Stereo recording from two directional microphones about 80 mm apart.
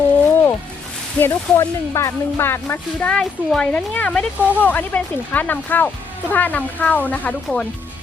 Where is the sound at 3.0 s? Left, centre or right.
Centre.